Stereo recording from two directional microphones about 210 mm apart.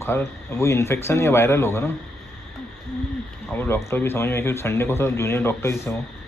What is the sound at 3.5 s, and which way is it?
Speech, 10° left (ahead or behind).